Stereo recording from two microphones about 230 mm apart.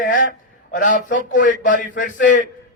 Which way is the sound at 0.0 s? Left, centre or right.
Left.